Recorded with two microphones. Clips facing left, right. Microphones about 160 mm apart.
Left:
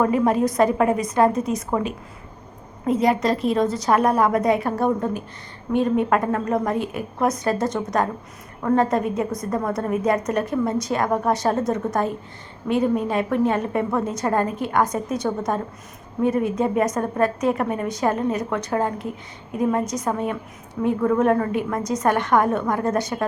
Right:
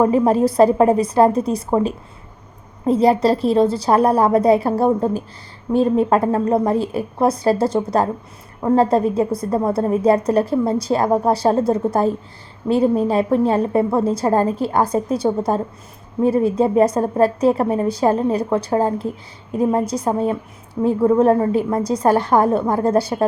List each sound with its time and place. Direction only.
0.0 s a woman's voice: 30° right (ahead or behind)